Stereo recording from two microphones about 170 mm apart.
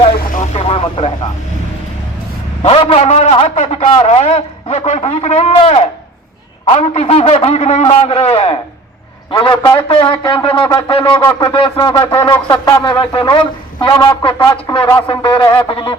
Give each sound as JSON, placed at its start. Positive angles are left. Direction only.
{"t": 0.3, "sound": "vehicle", "side_deg": 35}
{"t": 2.6, "sound": "a man's voice", "side_deg": 35}
{"t": 9.3, "sound": "shofar", "side_deg": 25}